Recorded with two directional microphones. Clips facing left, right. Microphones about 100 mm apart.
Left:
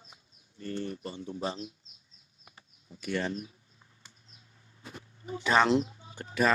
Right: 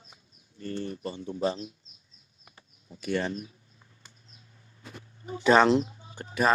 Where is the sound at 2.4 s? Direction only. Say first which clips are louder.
Even; 20° left (ahead or behind).